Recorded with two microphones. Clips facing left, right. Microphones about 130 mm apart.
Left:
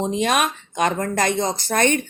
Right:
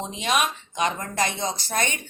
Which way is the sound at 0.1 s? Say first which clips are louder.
Left 4 dB; 50° left (ahead or behind).